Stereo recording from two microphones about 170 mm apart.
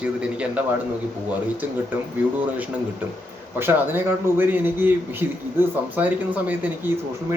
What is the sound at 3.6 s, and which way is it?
A man's voice, 10° right (ahead or behind).